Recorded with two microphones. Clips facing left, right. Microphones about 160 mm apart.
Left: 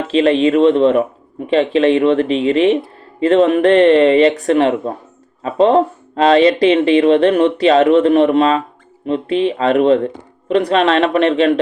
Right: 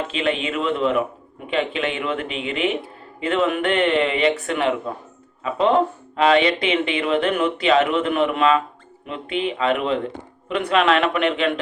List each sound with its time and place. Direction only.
0.1 s speech: 35° left (ahead or behind)